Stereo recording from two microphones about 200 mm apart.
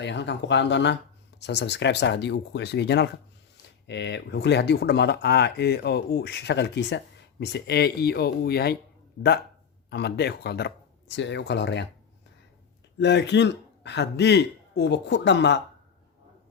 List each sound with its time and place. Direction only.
0.0 s speech: 60° left (ahead or behind)
9.9 s speech: 55° left (ahead or behind)
13.0 s speech: 60° left (ahead or behind)